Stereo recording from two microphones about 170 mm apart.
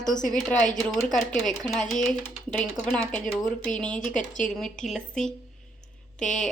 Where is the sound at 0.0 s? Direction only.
50° left (ahead or behind).